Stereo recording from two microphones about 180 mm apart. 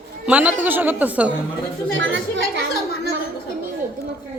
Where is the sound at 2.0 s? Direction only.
85° right.